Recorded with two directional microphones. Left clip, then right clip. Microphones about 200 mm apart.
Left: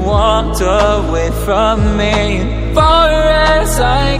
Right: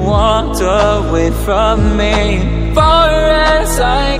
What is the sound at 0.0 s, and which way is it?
Music, centre (ahead or behind).